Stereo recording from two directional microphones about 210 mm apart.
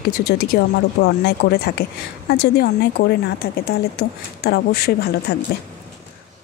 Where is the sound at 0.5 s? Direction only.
50° left (ahead or behind).